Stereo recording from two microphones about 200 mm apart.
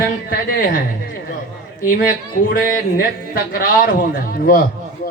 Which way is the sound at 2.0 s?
45° left (ahead or behind).